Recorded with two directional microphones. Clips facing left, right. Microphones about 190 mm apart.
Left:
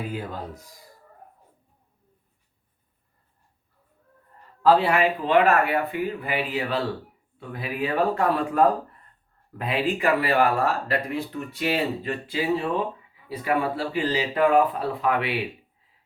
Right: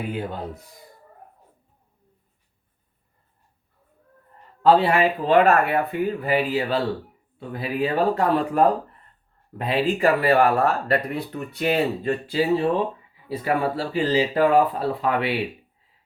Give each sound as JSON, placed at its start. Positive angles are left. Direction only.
{"t": 0.1, "sound": "speech", "side_deg": -25}
{"t": 4.6, "sound": "speech", "side_deg": -30}
{"t": 10.7, "sound": "speech", "side_deg": -50}